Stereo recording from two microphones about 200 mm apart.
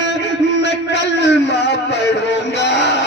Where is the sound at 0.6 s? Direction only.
60° left (ahead or behind).